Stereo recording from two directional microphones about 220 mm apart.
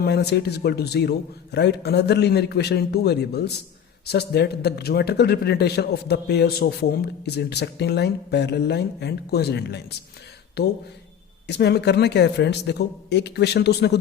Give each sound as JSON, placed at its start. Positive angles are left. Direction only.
{"t": 0.0, "sound": "a man's voice", "side_deg": 50}
{"t": 11.4, "sound": "a man's voice", "side_deg": 50}